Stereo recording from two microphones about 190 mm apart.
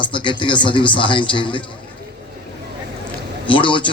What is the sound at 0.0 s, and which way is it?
A man's voice, 25° left (ahead or behind).